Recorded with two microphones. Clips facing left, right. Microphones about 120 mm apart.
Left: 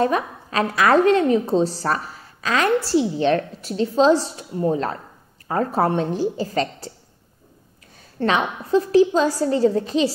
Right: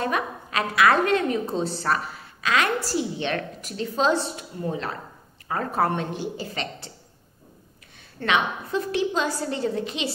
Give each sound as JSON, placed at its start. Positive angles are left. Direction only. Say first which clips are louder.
{"t": 0.0, "sound": "a woman's voice", "louder": "left 6 dB", "side_deg": 35}
{"t": 8.2, "sound": "a woman's voice", "louder": "left 3 dB", "side_deg": 35}